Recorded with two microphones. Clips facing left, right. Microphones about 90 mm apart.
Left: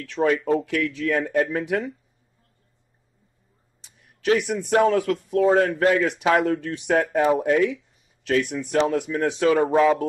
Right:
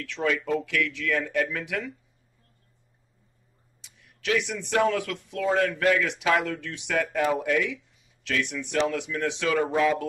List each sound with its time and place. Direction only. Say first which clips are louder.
0.0 s speech: left 6 dB; 40° left (ahead or behind)
3.8 s speech: left 7 dB; 40° left (ahead or behind)